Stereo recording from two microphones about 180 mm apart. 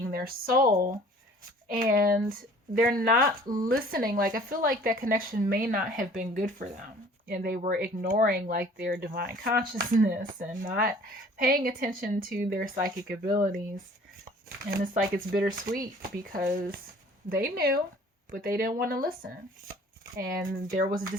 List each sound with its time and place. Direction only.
0.0 s speech: 55° right (ahead or behind)
15.1 s speech: 55° right (ahead or behind)
20.1 s speech: 55° right (ahead or behind)